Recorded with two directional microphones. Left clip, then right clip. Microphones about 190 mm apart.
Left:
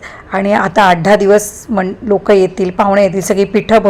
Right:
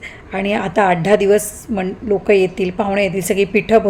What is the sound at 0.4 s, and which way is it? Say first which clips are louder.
A woman's voice: left 6 dB; centre (ahead or behind).